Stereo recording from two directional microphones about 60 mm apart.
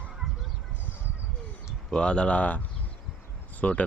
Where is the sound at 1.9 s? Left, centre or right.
Centre.